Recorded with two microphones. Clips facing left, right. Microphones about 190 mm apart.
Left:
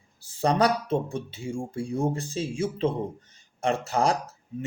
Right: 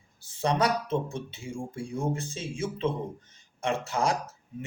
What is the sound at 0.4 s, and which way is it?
Speech, 35° left (ahead or behind).